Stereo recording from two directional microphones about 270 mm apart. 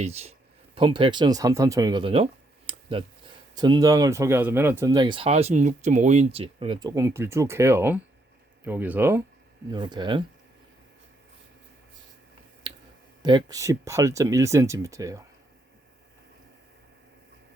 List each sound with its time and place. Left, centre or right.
0.0 s speech: right
12.7 s finger snapping: centre
13.2 s speech: centre